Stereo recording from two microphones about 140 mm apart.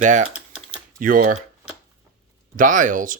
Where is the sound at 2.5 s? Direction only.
70° right (ahead or behind).